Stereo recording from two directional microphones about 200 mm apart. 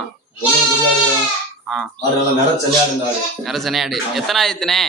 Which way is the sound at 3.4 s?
Centre (ahead or behind).